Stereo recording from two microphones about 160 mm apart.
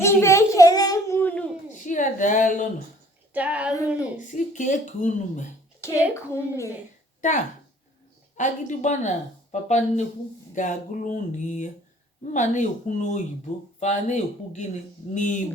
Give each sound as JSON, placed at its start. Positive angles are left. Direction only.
{"t": 0.0, "sound": "child singing", "side_deg": 15}
{"t": 1.8, "sound": "a sound", "side_deg": 55}
{"t": 3.3, "sound": "a sound", "side_deg": -10}
{"t": 4.2, "sound": "speech", "side_deg": 50}
{"t": 5.8, "sound": "a child's voice", "side_deg": 15}
{"t": 8.4, "sound": "speech", "side_deg": 50}